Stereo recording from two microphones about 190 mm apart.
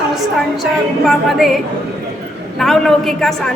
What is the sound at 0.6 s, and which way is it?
Speech, centre (ahead or behind).